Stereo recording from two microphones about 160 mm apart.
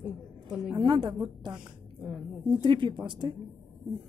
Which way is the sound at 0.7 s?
30° right (ahead or behind).